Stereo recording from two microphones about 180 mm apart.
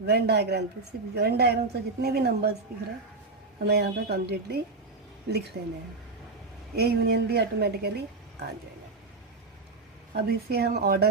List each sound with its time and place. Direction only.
0.0 s a woman's voice: 65° right (ahead or behind)
3.6 s a woman's voice: 65° right (ahead or behind)
6.7 s a woman's voice: 65° right (ahead or behind)
10.2 s a woman's voice: 60° right (ahead or behind)